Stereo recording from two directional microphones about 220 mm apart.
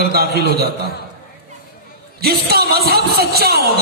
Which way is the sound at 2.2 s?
45° right (ahead or behind).